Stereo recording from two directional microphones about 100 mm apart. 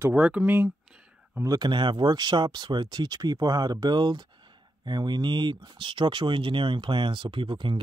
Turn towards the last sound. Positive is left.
turn(degrees=-55)  # may be behind; listen again after turning